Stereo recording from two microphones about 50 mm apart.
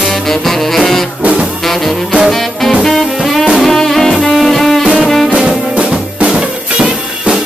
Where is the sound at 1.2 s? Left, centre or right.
Right.